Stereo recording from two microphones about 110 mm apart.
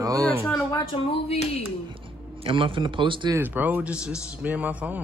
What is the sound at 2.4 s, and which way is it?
Speech, 55° right (ahead or behind).